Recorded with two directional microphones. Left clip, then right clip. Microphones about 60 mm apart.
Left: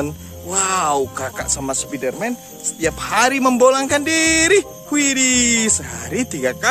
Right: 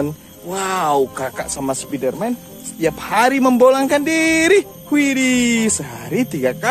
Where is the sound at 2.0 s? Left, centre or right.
Left.